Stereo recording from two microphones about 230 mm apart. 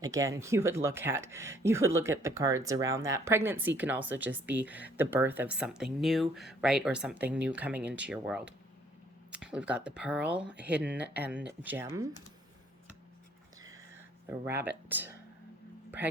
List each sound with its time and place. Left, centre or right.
0.0 s speech: centre
14.3 s speech: centre